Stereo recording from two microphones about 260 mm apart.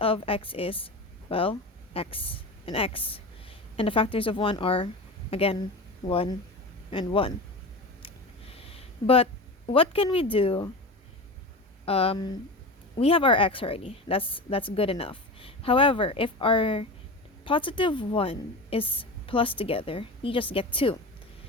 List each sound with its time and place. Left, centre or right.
0.0 s a woman's voice: left
8.5 s a woman's voice: left
11.9 s a woman's voice: left